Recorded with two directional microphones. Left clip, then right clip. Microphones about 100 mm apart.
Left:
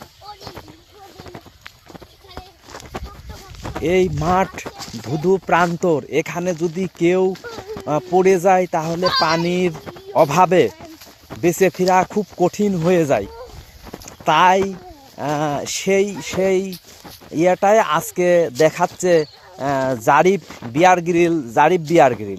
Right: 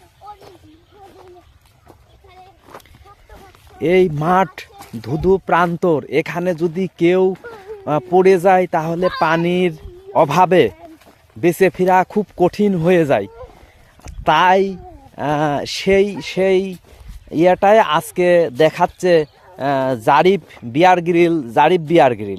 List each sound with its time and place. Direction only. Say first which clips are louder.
3.8 s speech: right 3 dB; 60° right (ahead or behind)
5.0 s speech: right 2 dB; 40° right (ahead or behind)
5.9 s speech: right 2 dB; 55° right (ahead or behind)
10.1 s speech: right 1 dB; 40° right (ahead or behind)
10.5 s speech: right 2 dB; 55° right (ahead or behind)
11.3 s speech: right 2 dB; 35° right (ahead or behind)
14.0 s clip-clop: right 1 dB; 55° right (ahead or behind)
15.2 s speech: right 3 dB; 65° right (ahead or behind); by 16.7 s 45° right (ahead or behind)
17.3 s speech: right 3 dB; 65° right (ahead or behind)
18.1 s speech: right 2 dB; 40° right (ahead or behind)